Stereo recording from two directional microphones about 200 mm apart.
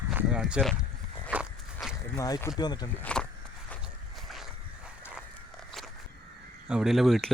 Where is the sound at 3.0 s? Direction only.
5° left (ahead or behind).